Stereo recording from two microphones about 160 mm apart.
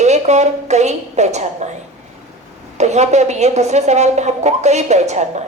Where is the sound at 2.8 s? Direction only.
45° right (ahead or behind).